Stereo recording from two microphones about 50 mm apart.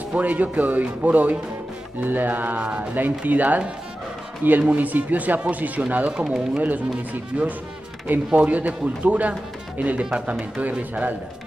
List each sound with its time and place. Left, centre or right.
0.1 s speech: right
2.6 s speech: right
2.9 s speech: right
6.1 s speech: centre
6.5 s speech: right
7.3 s speech: right